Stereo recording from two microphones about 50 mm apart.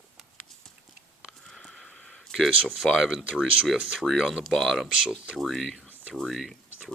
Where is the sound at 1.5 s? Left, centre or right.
Centre.